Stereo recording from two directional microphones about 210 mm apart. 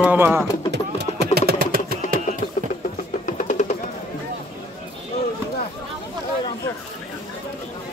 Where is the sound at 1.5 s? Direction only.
45° right (ahead or behind).